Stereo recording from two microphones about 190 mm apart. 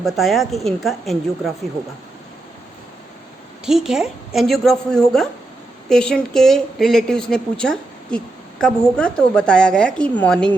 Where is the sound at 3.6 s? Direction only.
Centre (ahead or behind).